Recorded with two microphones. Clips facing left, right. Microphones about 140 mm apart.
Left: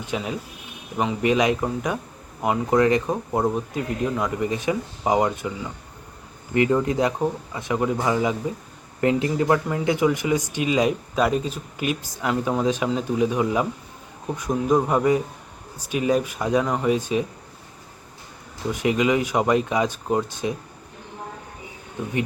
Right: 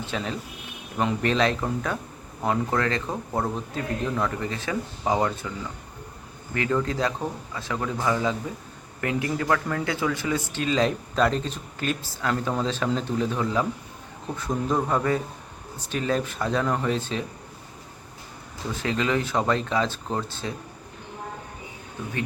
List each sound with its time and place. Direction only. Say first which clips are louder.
0.0 s speech: left 2 dB; 15° left (ahead or behind)
18.7 s speech: left 5 dB; 15° left (ahead or behind)